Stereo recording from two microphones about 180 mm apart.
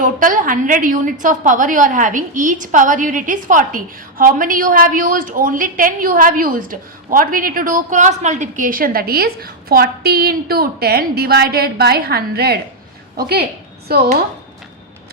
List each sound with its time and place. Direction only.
0.0 s a woman's voice: 50° right (ahead or behind)